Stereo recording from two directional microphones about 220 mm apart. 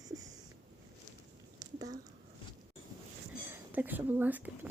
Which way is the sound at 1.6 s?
15° right (ahead or behind).